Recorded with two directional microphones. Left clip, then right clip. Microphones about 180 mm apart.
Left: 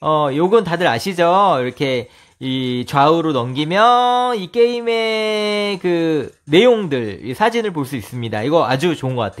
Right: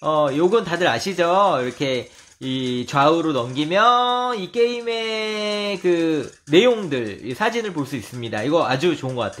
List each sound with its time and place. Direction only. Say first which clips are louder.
0.0 s speech: left 2 dB; 45° left (ahead or behind)